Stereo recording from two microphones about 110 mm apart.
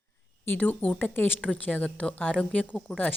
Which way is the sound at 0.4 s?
15° left (ahead or behind).